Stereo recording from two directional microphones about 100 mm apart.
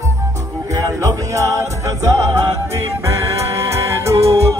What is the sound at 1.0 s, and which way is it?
Music, 30° right (ahead or behind).